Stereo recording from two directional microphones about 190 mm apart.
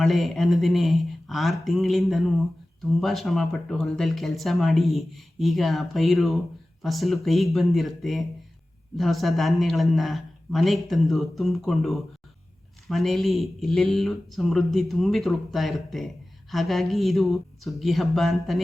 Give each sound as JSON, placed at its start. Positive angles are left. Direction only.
{"t": 0.0, "sound": "speech", "side_deg": 0}